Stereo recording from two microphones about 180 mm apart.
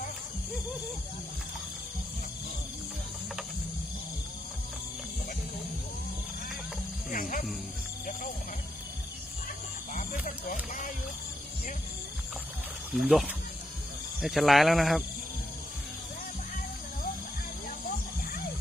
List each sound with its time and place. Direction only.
7.1 s music: 50° left (ahead or behind)
9.9 s music: 45° left (ahead or behind)
12.9 s speech: centre (ahead or behind)